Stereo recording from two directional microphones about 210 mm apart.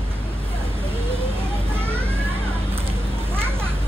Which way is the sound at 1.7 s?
10° right (ahead or behind).